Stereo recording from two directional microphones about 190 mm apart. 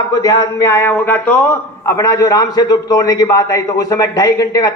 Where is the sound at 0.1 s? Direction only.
20° left (ahead or behind).